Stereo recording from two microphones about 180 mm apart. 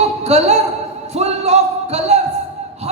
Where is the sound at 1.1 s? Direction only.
35° right (ahead or behind).